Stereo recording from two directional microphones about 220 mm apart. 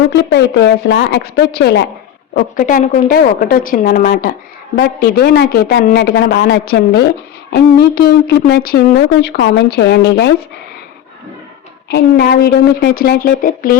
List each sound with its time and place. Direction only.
0.1 s a woman's voice: 50° left (ahead or behind)
2.3 s a woman's voice: 40° left (ahead or behind)
11.9 s a woman's voice: 50° left (ahead or behind)